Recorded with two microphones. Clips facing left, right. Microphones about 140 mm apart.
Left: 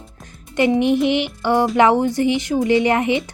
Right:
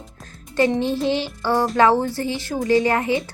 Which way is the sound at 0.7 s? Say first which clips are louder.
Left 4 dB; 15° left (ahead or behind).